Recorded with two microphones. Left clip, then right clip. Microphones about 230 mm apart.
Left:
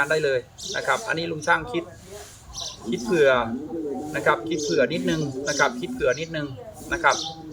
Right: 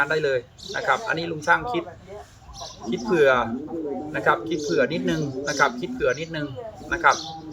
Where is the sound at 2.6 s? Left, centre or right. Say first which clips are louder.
Left 4 dB; left.